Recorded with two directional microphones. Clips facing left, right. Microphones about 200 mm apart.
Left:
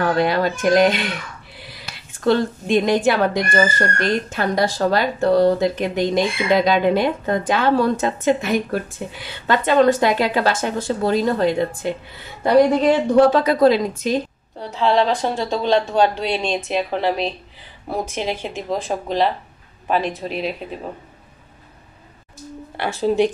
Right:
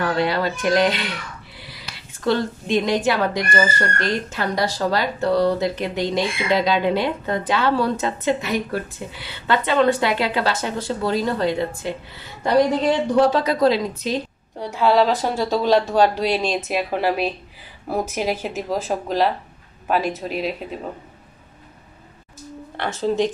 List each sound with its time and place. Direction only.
0.0 s speech: 50° left (ahead or behind)
2.2 s speech: 50° left (ahead or behind)
14.6 s speech: 10° right (ahead or behind)
22.8 s speech: 10° left (ahead or behind)